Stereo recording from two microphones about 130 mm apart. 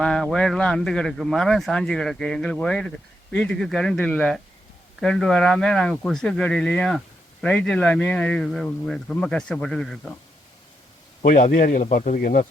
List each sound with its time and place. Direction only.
0.0 s speech: 5° left (ahead or behind)
11.2 s speech: 75° left (ahead or behind)